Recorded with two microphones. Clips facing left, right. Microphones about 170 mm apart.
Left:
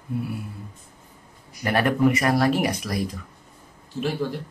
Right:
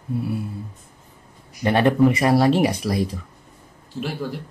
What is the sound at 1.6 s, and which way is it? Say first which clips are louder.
Speech: right 4 dB; 25° right (ahead or behind).